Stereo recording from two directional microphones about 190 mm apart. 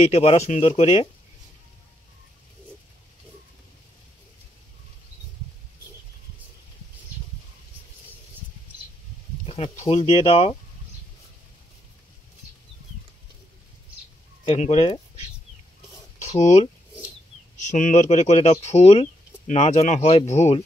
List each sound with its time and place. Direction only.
0.0 s speech: 30° left (ahead or behind)
9.5 s speech: 30° left (ahead or behind)
14.4 s speech: 35° left (ahead or behind)